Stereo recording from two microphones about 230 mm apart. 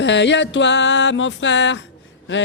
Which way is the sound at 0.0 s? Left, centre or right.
Left.